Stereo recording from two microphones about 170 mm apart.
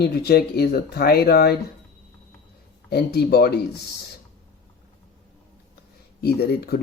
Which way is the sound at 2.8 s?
70° left (ahead or behind).